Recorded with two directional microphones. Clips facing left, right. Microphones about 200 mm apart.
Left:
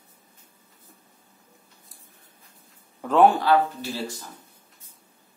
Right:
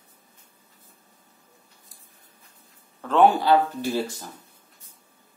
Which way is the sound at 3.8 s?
50° right (ahead or behind).